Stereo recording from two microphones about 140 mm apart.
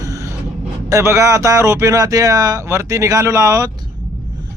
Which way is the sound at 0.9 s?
20° right (ahead or behind).